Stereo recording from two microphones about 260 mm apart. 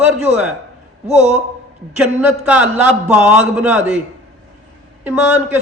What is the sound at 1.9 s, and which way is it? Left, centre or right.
A man's voice, centre.